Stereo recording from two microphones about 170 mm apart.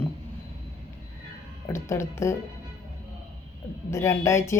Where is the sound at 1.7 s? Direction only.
15° left (ahead or behind).